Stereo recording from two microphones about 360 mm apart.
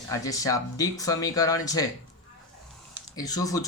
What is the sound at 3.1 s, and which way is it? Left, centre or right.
Speech, centre.